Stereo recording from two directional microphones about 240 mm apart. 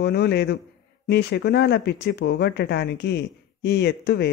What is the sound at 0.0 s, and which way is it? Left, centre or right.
A woman's voice, left.